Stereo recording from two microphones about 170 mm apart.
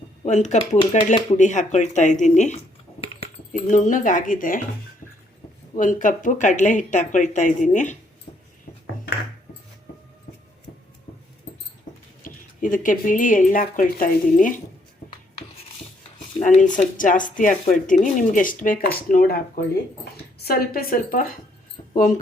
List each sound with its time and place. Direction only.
0.3 s speech: 45° left (ahead or behind)
3.0 s typing: 35° left (ahead or behind)
3.5 s speech: 50° left (ahead or behind)
5.7 s speech: 50° left (ahead or behind)
12.2 s speech: 50° left (ahead or behind)
16.4 s a woman's voice: 45° left (ahead or behind)